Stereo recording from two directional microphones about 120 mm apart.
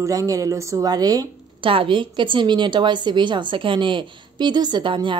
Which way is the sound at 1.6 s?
45° right (ahead or behind).